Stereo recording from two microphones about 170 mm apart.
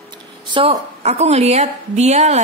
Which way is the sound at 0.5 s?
30° right (ahead or behind).